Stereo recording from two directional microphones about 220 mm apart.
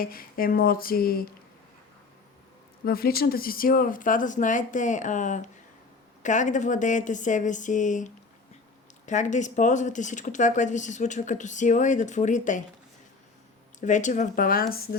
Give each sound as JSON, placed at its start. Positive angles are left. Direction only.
{"t": 0.0, "sound": "speech", "side_deg": 40}
{"t": 2.8, "sound": "speech", "side_deg": 45}
{"t": 13.7, "sound": "speech", "side_deg": 35}